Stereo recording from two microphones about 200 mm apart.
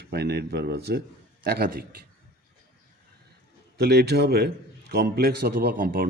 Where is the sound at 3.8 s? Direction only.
55° right (ahead or behind).